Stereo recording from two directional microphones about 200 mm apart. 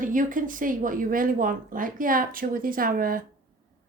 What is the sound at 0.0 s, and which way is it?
Speech, 40° right (ahead or behind).